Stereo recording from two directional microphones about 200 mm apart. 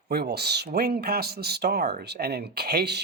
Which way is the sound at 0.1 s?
55° right (ahead or behind).